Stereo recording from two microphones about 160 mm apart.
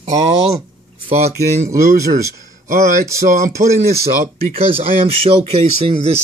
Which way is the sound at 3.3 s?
55° right (ahead or behind).